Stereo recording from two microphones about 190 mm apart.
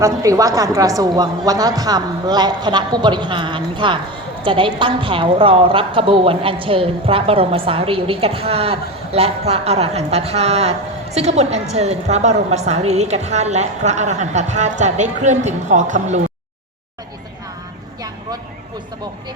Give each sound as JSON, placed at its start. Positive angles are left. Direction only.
{"t": 0.0, "sound": "a woman's voice", "side_deg": -15}